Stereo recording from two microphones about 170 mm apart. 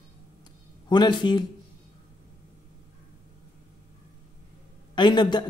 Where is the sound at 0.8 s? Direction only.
25° left (ahead or behind).